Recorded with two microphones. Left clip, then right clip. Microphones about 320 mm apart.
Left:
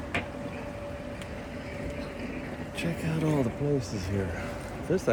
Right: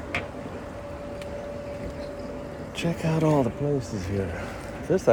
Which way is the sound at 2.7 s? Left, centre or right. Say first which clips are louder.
Right 6 dB; centre.